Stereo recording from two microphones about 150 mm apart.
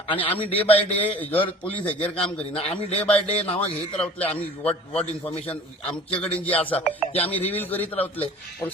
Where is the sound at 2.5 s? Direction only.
40° left (ahead or behind).